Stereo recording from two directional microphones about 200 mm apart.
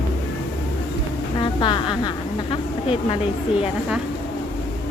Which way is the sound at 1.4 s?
25° left (ahead or behind).